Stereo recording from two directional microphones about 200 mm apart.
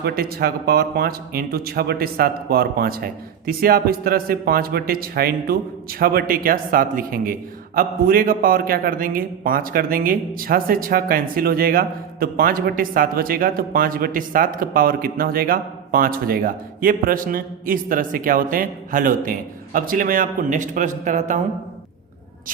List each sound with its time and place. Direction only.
0.0 s a man's voice: 50° right (ahead or behind)